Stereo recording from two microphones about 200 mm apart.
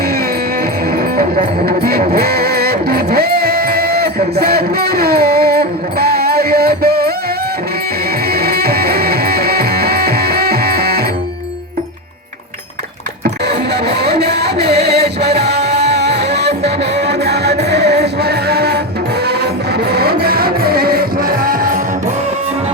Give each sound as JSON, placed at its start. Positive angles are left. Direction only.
{"t": 0.9, "sound": "music", "side_deg": -45}
{"t": 8.3, "sound": "music", "side_deg": -50}
{"t": 13.5, "sound": "music", "side_deg": -55}
{"t": 19.9, "sound": "music", "side_deg": -50}